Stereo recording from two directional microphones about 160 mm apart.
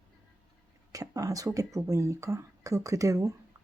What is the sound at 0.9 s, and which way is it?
Speech, 20° right (ahead or behind).